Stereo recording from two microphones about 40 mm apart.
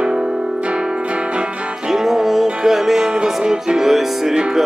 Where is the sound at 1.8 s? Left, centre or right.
Centre.